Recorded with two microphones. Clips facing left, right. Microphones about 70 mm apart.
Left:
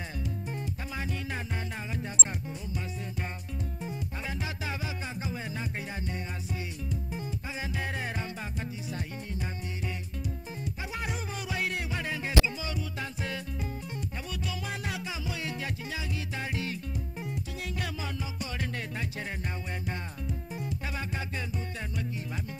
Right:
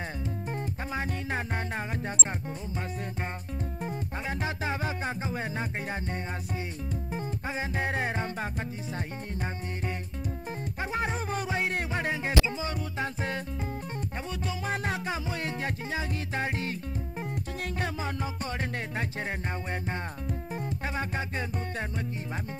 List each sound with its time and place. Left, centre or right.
0.9 s music: right
3.8 s music: right
7.2 s music: right
14.4 s music: right
17.7 s music: right